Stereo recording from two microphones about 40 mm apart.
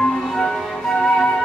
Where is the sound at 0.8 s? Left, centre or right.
Left.